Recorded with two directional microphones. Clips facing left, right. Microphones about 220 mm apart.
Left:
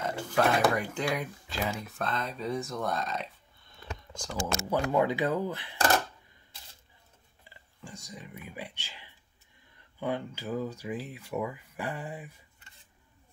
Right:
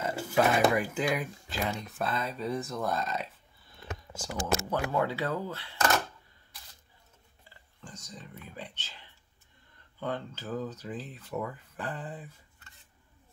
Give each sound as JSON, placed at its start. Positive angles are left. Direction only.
{"t": 0.0, "sound": "speech", "side_deg": -5}
{"t": 4.6, "sound": "speech", "side_deg": 15}
{"t": 7.8, "sound": "speech", "side_deg": 10}